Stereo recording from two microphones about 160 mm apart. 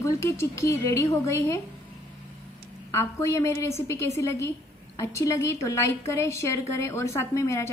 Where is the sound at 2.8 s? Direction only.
20° left (ahead or behind).